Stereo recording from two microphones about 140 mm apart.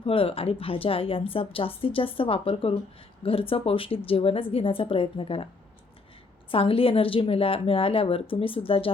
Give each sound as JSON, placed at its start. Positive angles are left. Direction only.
{"t": 0.0, "sound": "a woman's voice", "side_deg": 40}
{"t": 6.5, "sound": "a woman's voice", "side_deg": 40}